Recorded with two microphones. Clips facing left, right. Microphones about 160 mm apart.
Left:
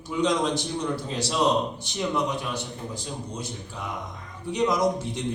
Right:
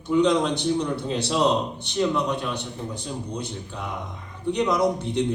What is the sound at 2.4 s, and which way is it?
A man's voice, 60° right (ahead or behind).